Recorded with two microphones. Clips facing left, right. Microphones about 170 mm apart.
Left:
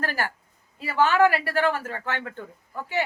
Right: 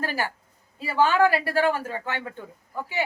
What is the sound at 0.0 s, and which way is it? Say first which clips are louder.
A woman's voice: even; 15° right (ahead or behind).